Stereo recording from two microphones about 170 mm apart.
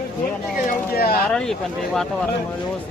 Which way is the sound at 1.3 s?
5° left (ahead or behind).